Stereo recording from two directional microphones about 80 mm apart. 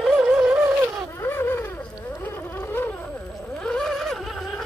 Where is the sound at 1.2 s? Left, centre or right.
Left.